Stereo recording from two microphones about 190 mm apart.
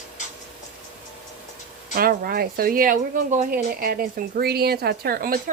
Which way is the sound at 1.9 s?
50° right (ahead or behind).